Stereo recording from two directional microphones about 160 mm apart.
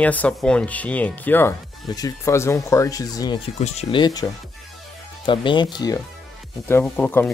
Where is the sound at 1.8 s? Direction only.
25° left (ahead or behind).